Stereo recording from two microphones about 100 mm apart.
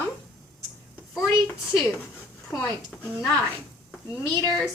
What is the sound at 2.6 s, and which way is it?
Speech, 15° left (ahead or behind).